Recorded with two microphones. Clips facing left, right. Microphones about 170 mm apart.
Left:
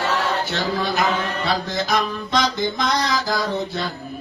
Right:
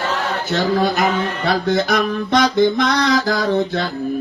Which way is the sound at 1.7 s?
55° right (ahead or behind).